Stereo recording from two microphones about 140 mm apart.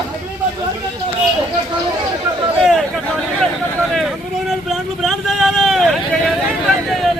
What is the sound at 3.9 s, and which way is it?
Vehicle, centre (ahead or behind).